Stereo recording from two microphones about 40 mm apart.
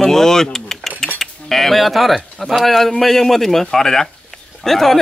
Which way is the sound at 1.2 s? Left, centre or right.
Centre.